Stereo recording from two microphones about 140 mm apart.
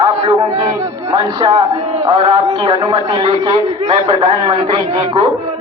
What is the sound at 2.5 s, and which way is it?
A woman's voice, 30° right (ahead or behind).